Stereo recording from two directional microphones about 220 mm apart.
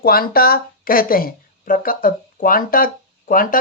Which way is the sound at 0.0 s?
45° left (ahead or behind).